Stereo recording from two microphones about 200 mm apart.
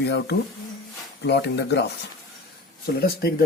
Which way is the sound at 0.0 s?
55° left (ahead or behind).